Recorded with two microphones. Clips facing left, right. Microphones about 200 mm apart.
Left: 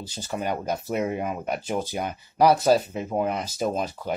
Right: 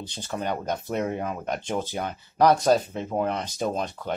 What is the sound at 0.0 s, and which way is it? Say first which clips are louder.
Speech: left 1 dB; 5° left (ahead or behind).